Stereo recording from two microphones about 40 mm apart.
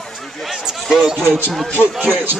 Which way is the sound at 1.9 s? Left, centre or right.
Right.